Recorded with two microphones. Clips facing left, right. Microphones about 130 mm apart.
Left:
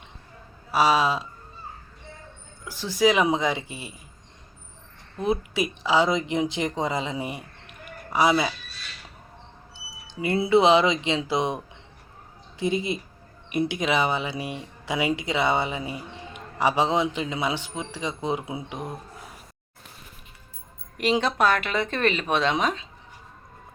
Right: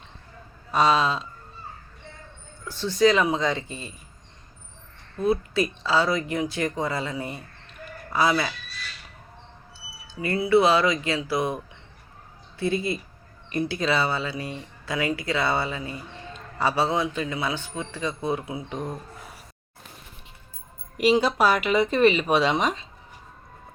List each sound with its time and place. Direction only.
0.7 s speech: 10° left (ahead or behind)
2.6 s speech: 10° left (ahead or behind)
5.1 s speech: 20° left (ahead or behind)
9.7 s a sound: 20° left (ahead or behind)
10.4 s speech: 20° left (ahead or behind)
18.7 s speech: 10° left (ahead or behind)
21.0 s speech: 5° right (ahead or behind)